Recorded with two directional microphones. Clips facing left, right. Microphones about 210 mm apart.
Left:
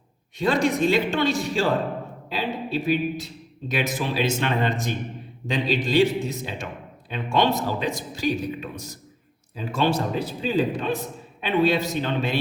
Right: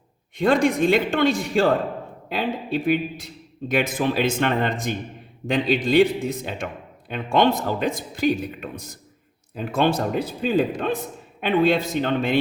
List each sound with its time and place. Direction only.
0.3 s a man's voice: 55° right (ahead or behind)